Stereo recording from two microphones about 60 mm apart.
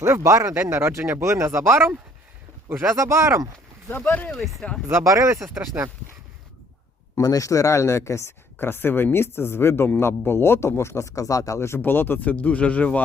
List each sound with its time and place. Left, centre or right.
0.0 s speech: right
0.5 s speech: right
2.9 s speech: right
3.8 s speech: left
4.3 s speech: centre
5.0 s speech: right
5.7 s speech: right
7.2 s speech: left
8.5 s speech: left
11.7 s speech: left